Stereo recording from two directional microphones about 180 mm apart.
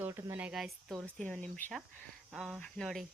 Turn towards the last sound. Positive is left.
turn(degrees=0)  # may be behind; listen again after turning